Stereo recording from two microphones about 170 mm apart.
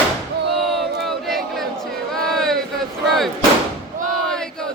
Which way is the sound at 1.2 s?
Centre (ahead or behind).